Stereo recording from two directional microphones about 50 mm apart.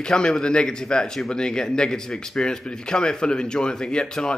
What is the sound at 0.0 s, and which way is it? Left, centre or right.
A man's voice, centre.